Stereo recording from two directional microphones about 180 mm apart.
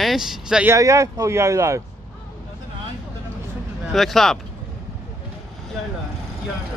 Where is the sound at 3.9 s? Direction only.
Centre (ahead or behind).